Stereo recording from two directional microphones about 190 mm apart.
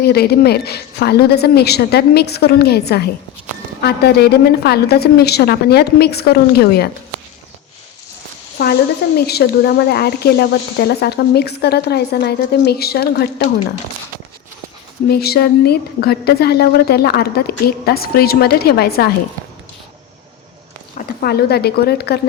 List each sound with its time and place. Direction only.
0.0 s speech: 55° left (ahead or behind)
8.5 s speech: 55° left (ahead or behind)
15.1 s speech: 55° left (ahead or behind)
21.2 s speech: 55° left (ahead or behind)